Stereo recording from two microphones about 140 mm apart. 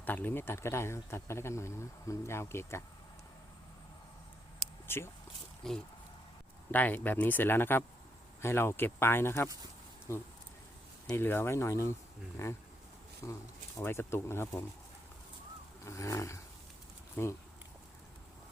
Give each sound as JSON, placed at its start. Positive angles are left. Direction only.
{"t": 0.0, "sound": "speech", "side_deg": 15}
{"t": 4.9, "sound": "speech", "side_deg": 15}
{"t": 5.6, "sound": "speech", "side_deg": 5}
{"t": 6.7, "sound": "speech", "side_deg": 15}
{"t": 11.1, "sound": "speech", "side_deg": 15}
{"t": 15.8, "sound": "speech", "side_deg": 20}